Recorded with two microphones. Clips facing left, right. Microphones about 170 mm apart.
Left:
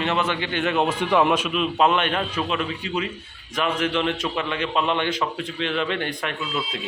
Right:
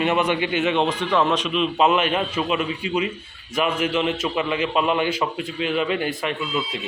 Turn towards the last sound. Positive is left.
turn(degrees=0)  # may be behind; listen again after turning